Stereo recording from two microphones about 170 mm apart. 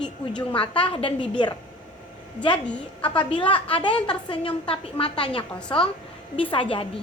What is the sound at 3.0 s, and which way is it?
A woman's voice, 30° left (ahead or behind).